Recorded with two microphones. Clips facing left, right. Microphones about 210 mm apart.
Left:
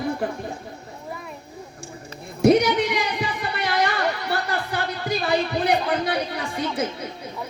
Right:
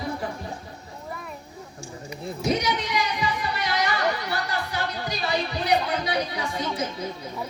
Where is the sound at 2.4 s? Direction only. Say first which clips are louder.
Left 9 dB; 60° left (ahead or behind).